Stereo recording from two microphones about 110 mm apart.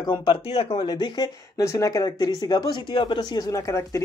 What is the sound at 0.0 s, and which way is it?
Speech, 40° left (ahead or behind).